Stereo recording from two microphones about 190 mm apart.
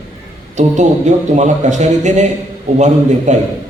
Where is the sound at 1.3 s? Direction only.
40° right (ahead or behind).